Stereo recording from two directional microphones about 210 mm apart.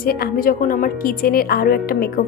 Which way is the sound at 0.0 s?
45° left (ahead or behind).